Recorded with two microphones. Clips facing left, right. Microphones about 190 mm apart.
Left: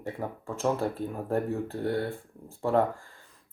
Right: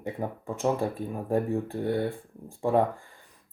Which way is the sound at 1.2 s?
15° right (ahead or behind).